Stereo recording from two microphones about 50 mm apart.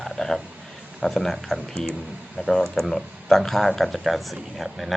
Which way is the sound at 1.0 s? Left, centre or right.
Centre.